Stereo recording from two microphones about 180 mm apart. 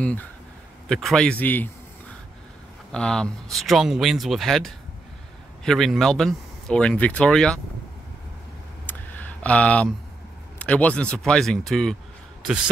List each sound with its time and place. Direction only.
0.0 s a man's voice: 10° left (ahead or behind)
8.8 s clicking: 10° left (ahead or behind)
10.6 s speech: 5° left (ahead or behind)